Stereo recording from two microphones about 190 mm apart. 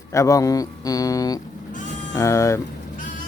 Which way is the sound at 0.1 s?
15° left (ahead or behind).